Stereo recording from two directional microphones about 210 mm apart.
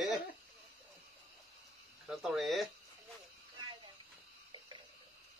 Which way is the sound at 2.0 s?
Centre (ahead or behind).